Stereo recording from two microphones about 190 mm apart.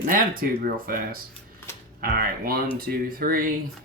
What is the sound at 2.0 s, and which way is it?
Speech, 50° right (ahead or behind).